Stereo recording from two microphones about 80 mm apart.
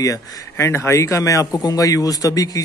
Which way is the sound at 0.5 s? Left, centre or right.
Left.